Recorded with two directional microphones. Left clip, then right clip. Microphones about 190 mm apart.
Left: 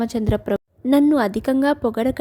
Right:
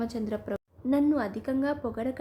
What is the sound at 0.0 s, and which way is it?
A woman's voice, 40° left (ahead or behind).